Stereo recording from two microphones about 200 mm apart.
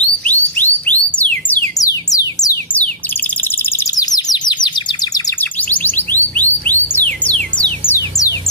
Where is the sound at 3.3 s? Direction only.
10° left (ahead or behind).